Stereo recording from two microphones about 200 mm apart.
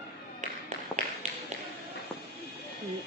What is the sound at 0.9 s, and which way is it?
Tap, 10° left (ahead or behind).